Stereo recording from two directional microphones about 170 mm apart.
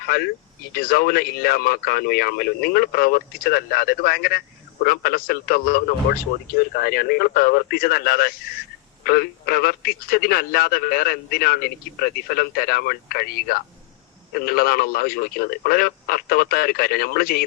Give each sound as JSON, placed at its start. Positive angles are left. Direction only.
{"t": 0.0, "sound": "speech", "side_deg": 60}